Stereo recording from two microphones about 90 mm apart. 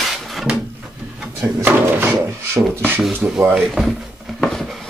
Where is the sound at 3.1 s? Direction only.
10° right (ahead or behind).